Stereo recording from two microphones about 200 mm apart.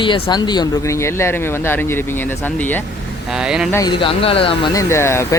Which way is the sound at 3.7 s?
15° left (ahead or behind).